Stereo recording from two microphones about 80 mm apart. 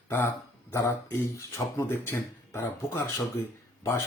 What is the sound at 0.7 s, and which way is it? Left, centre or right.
Speech, left.